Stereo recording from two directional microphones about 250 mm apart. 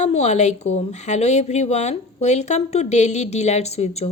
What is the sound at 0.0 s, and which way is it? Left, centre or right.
A woman's voice, left.